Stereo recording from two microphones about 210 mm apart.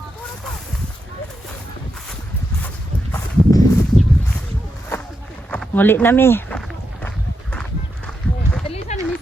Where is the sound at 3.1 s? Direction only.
15° left (ahead or behind).